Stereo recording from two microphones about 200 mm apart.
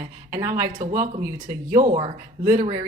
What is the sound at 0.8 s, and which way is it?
Speech, 35° right (ahead or behind).